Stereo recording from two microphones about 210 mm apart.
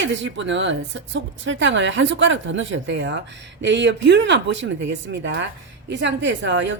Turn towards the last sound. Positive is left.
turn(degrees=-60)  # may be behind; listen again after turning